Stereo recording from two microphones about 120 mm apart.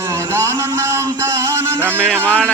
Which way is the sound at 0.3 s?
25° right (ahead or behind).